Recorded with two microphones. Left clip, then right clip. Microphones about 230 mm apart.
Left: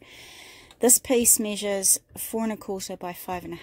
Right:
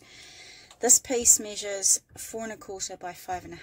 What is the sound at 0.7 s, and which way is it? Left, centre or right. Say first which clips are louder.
Speech: left 3 dB; left.